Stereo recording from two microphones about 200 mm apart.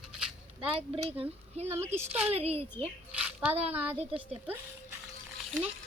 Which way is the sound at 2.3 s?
30° right (ahead or behind).